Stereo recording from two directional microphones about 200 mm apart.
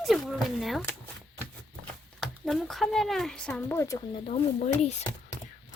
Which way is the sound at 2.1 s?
Centre (ahead or behind).